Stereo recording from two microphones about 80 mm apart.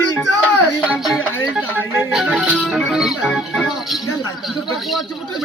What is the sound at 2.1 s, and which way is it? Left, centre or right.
A man's voice, centre.